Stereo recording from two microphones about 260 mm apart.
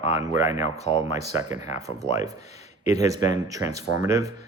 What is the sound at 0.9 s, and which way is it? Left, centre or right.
Speech, left.